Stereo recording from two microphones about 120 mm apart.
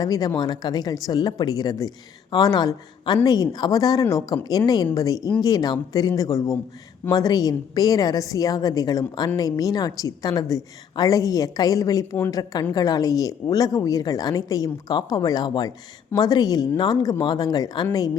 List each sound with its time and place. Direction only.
0.0 s a woman's voice: 30° left (ahead or behind)